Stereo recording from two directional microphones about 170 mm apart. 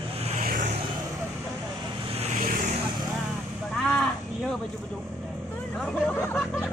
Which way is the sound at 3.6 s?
5° left (ahead or behind).